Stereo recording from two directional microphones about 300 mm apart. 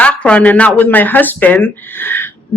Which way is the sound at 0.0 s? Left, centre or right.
Centre.